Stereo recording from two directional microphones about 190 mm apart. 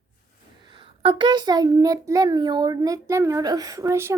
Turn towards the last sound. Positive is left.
turn(degrees=-15)  # may be behind; listen again after turning